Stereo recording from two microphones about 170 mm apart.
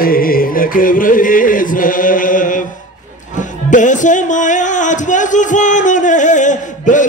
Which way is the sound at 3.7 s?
50° left (ahead or behind).